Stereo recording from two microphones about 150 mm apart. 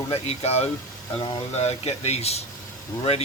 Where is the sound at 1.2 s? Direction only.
30° left (ahead or behind).